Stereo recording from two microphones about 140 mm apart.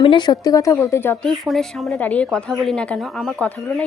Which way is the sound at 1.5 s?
Centre (ahead or behind).